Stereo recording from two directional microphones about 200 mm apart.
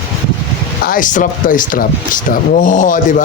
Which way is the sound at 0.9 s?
40° left (ahead or behind).